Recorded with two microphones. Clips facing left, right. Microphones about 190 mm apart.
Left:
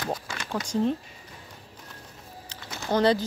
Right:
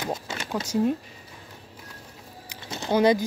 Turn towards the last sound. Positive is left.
turn(degrees=-10)  # may be behind; listen again after turning